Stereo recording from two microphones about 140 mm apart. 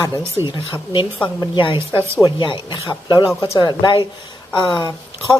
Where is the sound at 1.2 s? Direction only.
35° left (ahead or behind).